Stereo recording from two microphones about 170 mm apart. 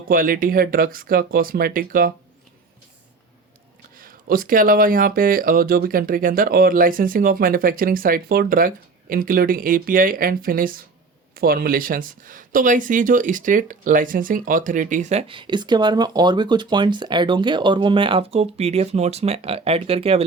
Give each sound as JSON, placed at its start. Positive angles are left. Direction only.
{"t": 0.1, "sound": "speech", "side_deg": -55}
{"t": 3.9, "sound": "speech", "side_deg": -55}